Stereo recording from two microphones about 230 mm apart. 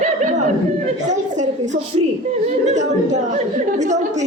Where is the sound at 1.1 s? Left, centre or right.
Right.